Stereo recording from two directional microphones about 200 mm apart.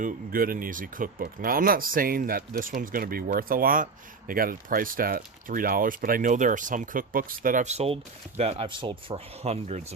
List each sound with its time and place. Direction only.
0.0 s speech: 45° right (ahead or behind)